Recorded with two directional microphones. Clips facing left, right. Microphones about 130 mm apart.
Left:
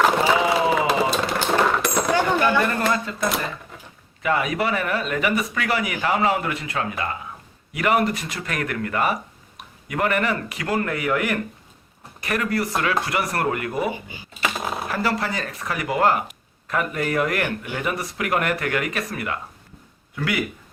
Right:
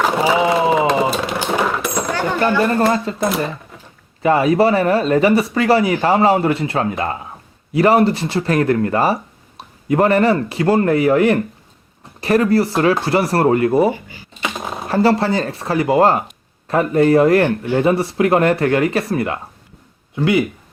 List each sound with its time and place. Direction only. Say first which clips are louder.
0.0 s a sound: right 2 dB; 5° right (ahead or behind)
0.6 s a sound: right 5 dB; 25° right (ahead or behind)
1.3 s coin: right 1 dB; 10° right (ahead or behind)
2.6 s speech: right 6 dB; 30° right (ahead or behind)
3.2 s speech: right 5 dB; centre (ahead or behind)
4.2 s speech: right 9 dB; 30° right (ahead or behind)
14.4 s typing: right 1 dB; centre (ahead or behind)
14.8 s speech: right 12 dB; 30° right (ahead or behind)